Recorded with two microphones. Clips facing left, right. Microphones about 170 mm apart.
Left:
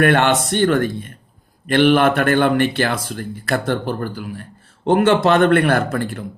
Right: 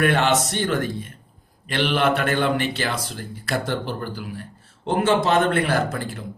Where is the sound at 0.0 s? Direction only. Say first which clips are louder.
Left 4 dB; 60° left (ahead or behind).